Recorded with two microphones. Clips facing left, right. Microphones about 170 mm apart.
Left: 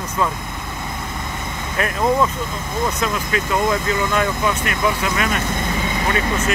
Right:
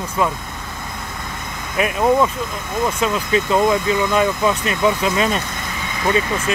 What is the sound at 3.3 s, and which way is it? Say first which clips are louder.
Speech: right 4 dB; 20° right (ahead or behind).